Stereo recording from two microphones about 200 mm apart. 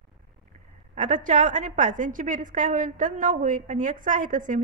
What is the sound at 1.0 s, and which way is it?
A woman's voice, 40° right (ahead or behind).